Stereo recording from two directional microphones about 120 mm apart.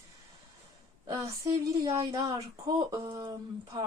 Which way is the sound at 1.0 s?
30° right (ahead or behind).